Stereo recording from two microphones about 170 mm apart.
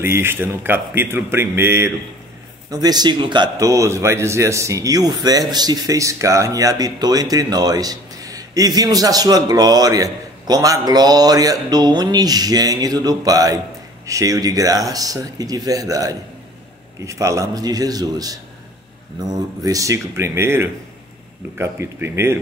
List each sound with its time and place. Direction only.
0.0 s a man's voice: 15° right (ahead or behind)